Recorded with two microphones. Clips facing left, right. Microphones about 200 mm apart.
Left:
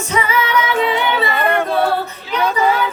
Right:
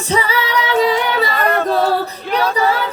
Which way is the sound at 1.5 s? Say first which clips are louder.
Right 2 dB; 10° left (ahead or behind).